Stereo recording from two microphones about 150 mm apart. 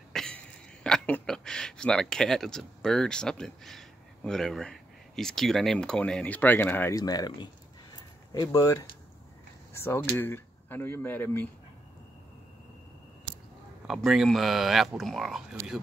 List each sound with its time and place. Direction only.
0.1 s throat clearing: 5° left (ahead or behind)
0.8 s speech: 5° left (ahead or behind)
7.0 s speech: 25° left (ahead or behind)
7.9 s a sound: 25° left (ahead or behind)
9.8 s speech: 15° left (ahead or behind)
13.8 s speech: centre (ahead or behind)